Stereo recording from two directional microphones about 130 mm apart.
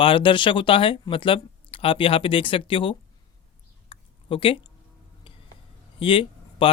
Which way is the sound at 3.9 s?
45° left (ahead or behind).